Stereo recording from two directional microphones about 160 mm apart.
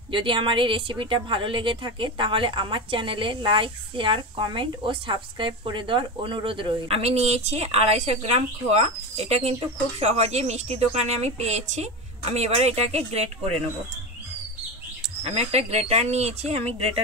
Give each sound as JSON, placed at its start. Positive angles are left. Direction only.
{"t": 0.1, "sound": "speech", "side_deg": -30}
{"t": 15.2, "sound": "speech", "side_deg": -40}